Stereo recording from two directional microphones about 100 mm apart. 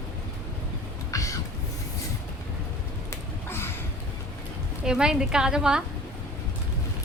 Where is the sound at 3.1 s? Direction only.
25° left (ahead or behind).